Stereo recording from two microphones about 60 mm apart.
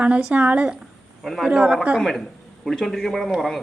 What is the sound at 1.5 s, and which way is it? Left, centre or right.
Speech, centre.